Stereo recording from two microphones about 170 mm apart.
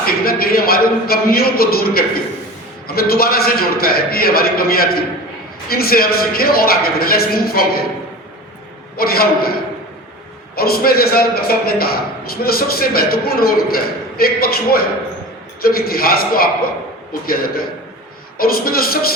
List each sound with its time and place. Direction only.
0.0 s a man's voice: 60° left (ahead or behind)
9.0 s a man's voice: 65° left (ahead or behind)
10.5 s a man's voice: 65° left (ahead or behind)